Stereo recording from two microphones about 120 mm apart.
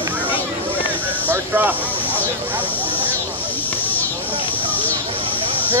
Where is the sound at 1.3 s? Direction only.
15° right (ahead or behind).